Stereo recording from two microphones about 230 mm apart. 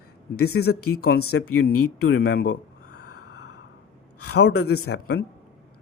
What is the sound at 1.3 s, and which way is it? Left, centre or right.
Speech, left.